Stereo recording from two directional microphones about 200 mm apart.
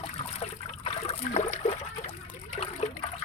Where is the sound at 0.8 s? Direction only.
30° left (ahead or behind).